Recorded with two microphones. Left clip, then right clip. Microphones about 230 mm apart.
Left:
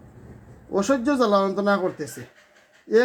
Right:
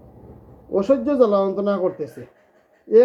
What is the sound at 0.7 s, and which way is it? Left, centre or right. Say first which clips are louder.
Speech: right 3 dB; left.